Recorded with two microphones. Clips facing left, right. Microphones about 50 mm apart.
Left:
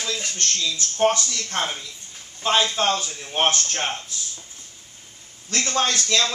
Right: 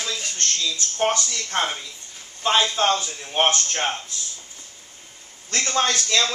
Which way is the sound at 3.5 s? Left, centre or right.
Centre.